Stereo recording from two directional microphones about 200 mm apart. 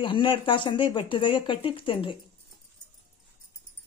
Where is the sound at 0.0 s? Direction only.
25° left (ahead or behind).